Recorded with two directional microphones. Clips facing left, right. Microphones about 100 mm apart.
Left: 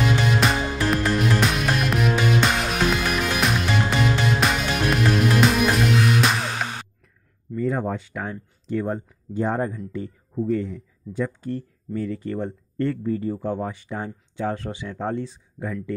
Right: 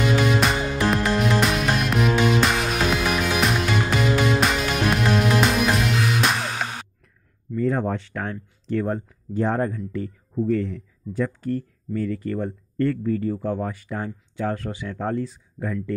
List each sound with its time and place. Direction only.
0.0 s music: centre (ahead or behind)
7.5 s speech: 10° left (ahead or behind)